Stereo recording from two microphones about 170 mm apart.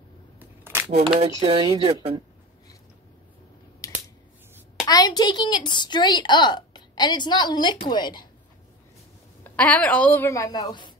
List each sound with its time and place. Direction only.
0.4 s single-lens reflex camera: 10° right (ahead or behind)
1.4 s speech: 30° right (ahead or behind)
3.8 s scissors: 20° left (ahead or behind)
4.8 s a woman's voice: 25° left (ahead or behind)
9.4 s a woman's voice: 10° left (ahead or behind); by 10.9 s 25° left (ahead or behind)